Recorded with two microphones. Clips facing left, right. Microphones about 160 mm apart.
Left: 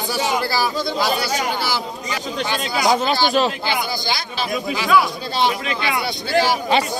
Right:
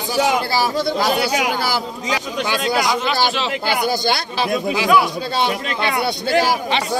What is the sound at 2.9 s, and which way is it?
Speech, 40° left (ahead or behind).